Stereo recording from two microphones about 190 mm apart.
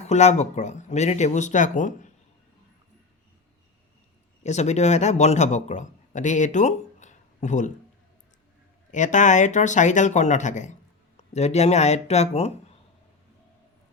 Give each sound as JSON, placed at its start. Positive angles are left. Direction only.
{"t": 0.0, "sound": "speech", "side_deg": 35}
{"t": 4.4, "sound": "a man's voice", "side_deg": 35}
{"t": 8.9, "sound": "speech", "side_deg": 40}